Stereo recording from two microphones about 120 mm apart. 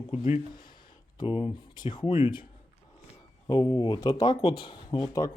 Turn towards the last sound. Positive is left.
turn(degrees=25)  # may be behind; listen again after turning